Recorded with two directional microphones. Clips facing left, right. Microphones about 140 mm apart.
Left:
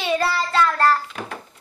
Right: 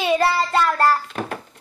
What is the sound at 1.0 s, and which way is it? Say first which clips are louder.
Speech: right 5 dB; 50° right (ahead or behind).